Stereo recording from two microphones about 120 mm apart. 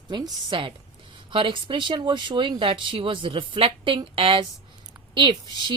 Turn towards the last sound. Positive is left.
turn(degrees=-40)  # may be behind; listen again after turning